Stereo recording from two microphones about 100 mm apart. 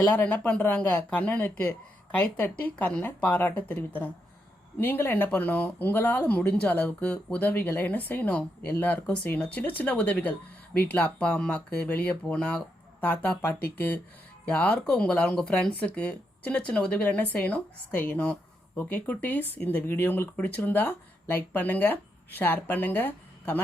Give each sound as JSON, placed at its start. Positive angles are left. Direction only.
{"t": 0.1, "sound": "speech", "side_deg": 15}